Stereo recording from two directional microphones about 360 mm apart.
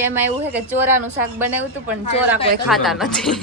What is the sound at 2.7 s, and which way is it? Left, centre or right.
Speech, centre.